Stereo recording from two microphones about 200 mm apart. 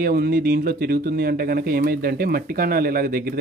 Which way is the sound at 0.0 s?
50° right (ahead or behind).